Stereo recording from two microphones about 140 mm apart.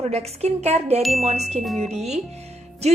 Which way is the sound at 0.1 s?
50° right (ahead or behind).